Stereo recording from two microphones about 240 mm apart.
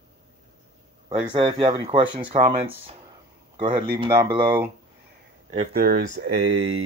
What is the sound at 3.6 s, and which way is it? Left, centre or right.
Speech, right.